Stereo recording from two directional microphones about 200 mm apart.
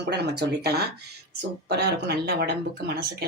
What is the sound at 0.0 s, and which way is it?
Speech, 55° right (ahead or behind).